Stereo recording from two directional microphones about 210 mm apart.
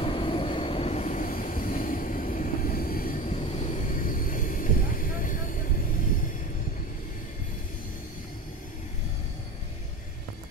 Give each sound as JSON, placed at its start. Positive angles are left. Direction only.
{"t": 0.0, "sound": "train", "side_deg": 25}